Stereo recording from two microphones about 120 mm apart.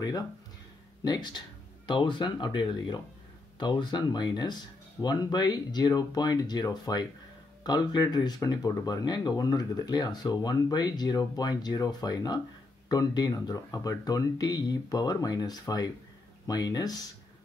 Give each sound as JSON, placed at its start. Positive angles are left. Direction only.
{"t": 1.0, "sound": "speech", "side_deg": 35}